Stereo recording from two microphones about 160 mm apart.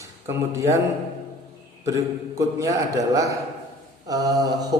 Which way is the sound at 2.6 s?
20° right (ahead or behind).